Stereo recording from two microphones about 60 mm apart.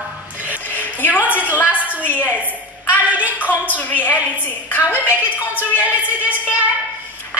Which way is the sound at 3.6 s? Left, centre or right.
Left.